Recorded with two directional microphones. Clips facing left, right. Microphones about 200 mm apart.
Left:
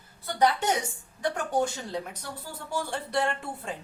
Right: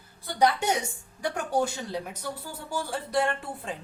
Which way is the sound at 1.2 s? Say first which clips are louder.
Even; 10° right (ahead or behind).